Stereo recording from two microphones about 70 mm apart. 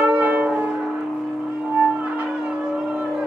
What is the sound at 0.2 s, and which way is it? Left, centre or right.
Music, right.